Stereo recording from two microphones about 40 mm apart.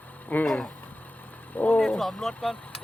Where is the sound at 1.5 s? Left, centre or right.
Left.